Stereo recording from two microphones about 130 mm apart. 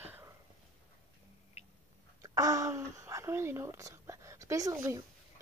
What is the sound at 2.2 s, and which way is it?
Speech, 25° right (ahead or behind).